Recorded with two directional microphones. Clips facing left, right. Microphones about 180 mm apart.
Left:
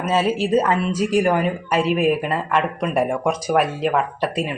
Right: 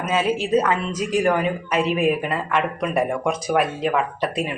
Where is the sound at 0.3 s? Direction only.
5° left (ahead or behind).